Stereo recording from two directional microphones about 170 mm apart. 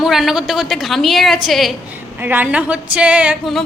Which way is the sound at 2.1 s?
10° right (ahead or behind).